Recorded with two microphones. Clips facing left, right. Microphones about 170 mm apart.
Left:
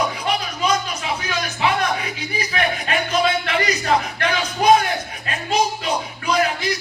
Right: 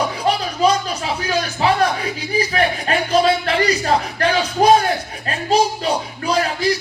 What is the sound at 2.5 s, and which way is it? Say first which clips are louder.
Speech: even; 35° right (ahead or behind).